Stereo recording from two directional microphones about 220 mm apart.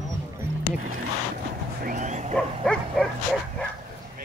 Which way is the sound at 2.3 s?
5° left (ahead or behind).